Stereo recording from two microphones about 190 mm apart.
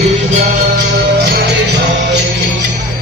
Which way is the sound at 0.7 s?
55° right (ahead or behind).